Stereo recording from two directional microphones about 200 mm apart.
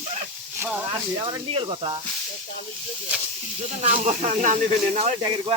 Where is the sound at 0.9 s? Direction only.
25° right (ahead or behind).